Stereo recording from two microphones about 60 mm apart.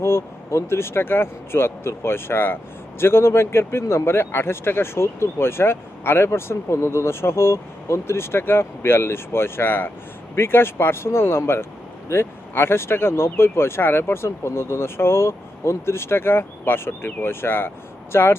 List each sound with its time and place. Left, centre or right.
0.0 s speech: left